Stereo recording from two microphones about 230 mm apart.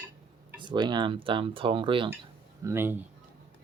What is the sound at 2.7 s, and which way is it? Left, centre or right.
Speech, centre.